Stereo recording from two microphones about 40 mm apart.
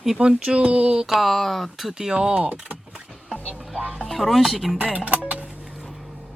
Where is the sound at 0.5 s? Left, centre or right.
Right.